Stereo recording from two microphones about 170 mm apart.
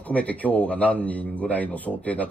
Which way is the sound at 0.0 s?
10° left (ahead or behind).